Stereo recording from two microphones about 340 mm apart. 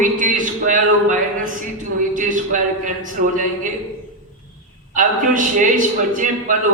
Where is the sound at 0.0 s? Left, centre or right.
Right.